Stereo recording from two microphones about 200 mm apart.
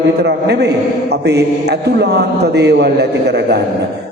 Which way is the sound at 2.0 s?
55° right (ahead or behind).